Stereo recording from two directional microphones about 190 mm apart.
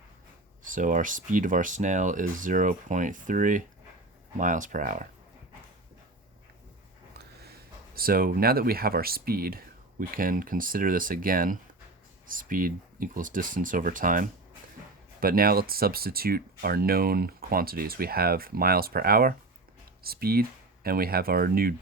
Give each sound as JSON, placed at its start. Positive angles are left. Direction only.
{"t": 0.6, "sound": "speech", "side_deg": -45}
{"t": 7.2, "sound": "speech", "side_deg": -55}